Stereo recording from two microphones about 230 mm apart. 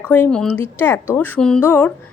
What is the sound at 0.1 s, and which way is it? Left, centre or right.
Speech, centre.